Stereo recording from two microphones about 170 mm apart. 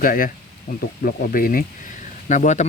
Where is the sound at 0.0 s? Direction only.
55° left (ahead or behind).